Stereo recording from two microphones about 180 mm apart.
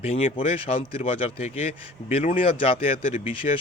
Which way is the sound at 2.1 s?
35° left (ahead or behind).